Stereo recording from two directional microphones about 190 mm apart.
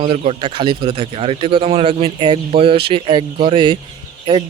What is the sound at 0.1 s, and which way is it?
Speech, 30° right (ahead or behind).